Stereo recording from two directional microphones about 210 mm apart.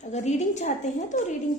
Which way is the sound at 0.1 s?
35° left (ahead or behind).